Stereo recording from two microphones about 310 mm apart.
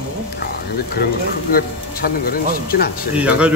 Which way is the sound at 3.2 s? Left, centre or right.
Centre.